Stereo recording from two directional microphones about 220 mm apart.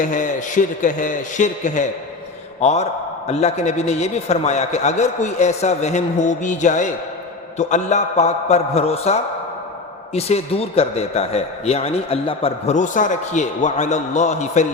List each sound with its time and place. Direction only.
0.0 s a man's voice: 35° left (ahead or behind)